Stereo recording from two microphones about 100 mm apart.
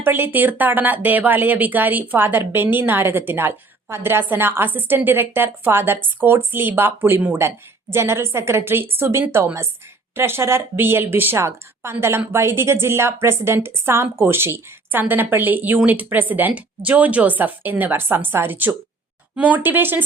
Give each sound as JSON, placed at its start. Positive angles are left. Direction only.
{"t": 0.0, "sound": "speech", "side_deg": -20}